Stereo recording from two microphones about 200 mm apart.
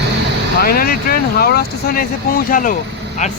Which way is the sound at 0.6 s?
50° left (ahead or behind).